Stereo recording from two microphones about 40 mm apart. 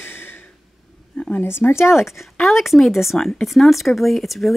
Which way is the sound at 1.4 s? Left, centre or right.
Left.